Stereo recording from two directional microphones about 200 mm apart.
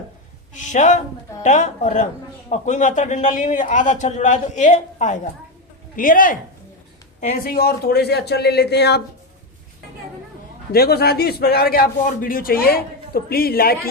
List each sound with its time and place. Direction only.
0.5 s a man's voice: 40° left (ahead or behind); by 9.0 s 55° left (ahead or behind)
10.7 s a man's voice: 50° left (ahead or behind)